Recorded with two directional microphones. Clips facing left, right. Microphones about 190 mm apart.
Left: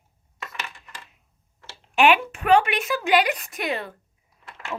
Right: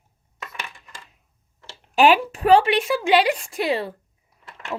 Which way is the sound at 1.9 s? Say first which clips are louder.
Right 2 dB; 35° right (ahead or behind).